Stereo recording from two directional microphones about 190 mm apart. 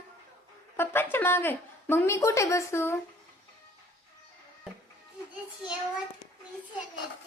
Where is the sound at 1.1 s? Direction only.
10° left (ahead or behind).